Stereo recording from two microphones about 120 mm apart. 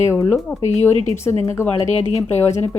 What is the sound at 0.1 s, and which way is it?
Speech, 25° left (ahead or behind).